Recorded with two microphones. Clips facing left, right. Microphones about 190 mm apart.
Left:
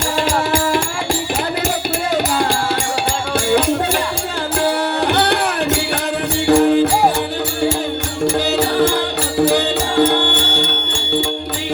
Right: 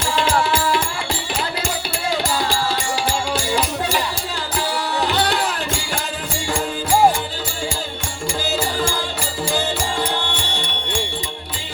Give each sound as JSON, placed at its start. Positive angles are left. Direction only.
{"t": 4.5, "sound": "music", "side_deg": 55}
{"t": 9.4, "sound": "music", "side_deg": 65}